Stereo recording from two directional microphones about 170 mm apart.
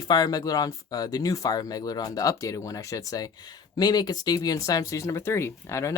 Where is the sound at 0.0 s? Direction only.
25° left (ahead or behind).